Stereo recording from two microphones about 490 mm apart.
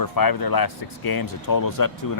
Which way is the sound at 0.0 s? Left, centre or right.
Left.